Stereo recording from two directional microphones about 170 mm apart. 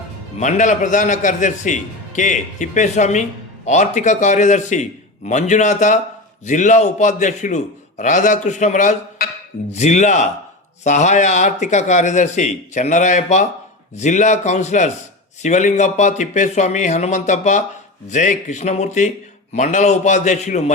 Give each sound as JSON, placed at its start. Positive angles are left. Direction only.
{"t": 0.3, "sound": "a man's voice", "side_deg": 45}